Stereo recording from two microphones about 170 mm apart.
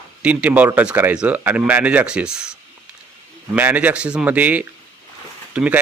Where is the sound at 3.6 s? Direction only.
10° right (ahead or behind).